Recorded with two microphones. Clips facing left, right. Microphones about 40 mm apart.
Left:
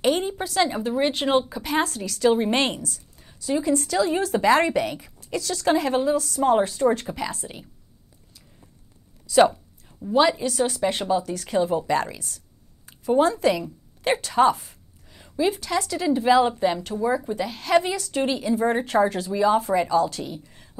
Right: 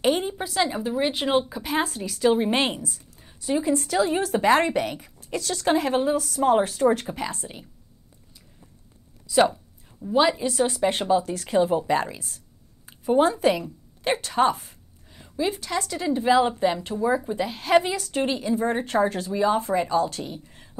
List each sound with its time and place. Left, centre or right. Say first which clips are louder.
0.0 s a woman's voice: left 1 dB; centre
9.3 s a woman's voice: left 3 dB; centre
14.0 s a woman's voice: left 2 dB; centre